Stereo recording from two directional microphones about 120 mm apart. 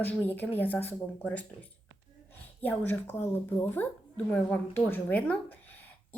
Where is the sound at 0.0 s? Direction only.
15° left (ahead or behind).